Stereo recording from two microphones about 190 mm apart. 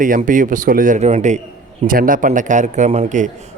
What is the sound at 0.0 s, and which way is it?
A man's voice, 45° right (ahead or behind).